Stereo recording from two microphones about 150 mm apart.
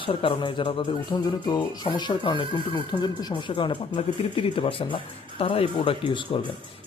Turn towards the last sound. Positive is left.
turn(degrees=35)  # may be behind; listen again after turning